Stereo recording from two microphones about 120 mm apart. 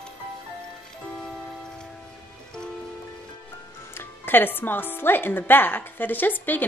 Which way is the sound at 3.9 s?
20° left (ahead or behind).